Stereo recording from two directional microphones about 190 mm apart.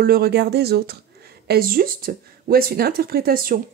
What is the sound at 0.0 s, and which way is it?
Speech, 55° right (ahead or behind).